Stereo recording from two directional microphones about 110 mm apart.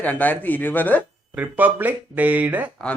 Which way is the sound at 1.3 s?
15° right (ahead or behind).